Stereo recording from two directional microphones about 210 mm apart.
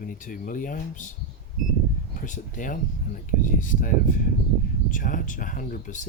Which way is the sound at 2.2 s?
40° left (ahead or behind).